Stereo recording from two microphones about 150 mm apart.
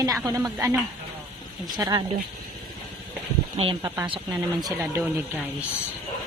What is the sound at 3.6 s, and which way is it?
Speech, 35° right (ahead or behind).